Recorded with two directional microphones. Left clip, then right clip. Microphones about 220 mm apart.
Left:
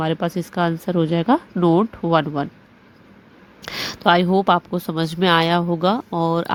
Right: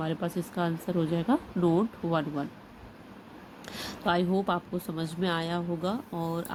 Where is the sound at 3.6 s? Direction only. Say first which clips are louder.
Left 12 dB; 35° left (ahead or behind).